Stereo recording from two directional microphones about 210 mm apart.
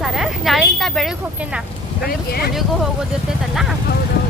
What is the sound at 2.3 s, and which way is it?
Speech, 50° left (ahead or behind).